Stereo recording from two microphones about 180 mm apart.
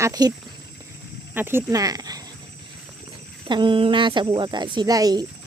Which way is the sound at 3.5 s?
25° right (ahead or behind).